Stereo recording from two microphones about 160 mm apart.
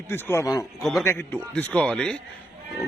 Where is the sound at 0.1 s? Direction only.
15° left (ahead or behind).